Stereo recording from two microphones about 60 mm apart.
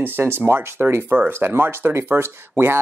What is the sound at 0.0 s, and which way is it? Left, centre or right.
Speech, right.